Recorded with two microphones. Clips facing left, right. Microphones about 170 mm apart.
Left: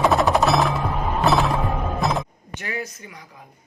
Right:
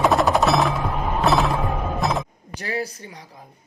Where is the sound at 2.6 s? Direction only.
35° right (ahead or behind).